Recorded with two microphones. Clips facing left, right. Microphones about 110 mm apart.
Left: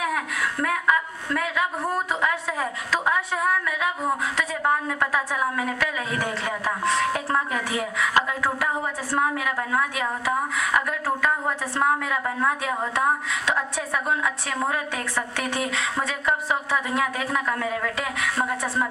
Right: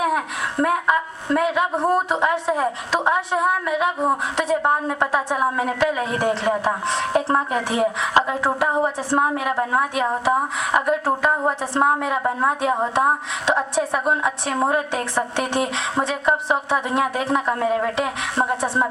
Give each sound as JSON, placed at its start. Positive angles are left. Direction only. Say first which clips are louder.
{"t": 0.0, "sound": "a woman's voice", "louder": "right 4 dB", "side_deg": -25}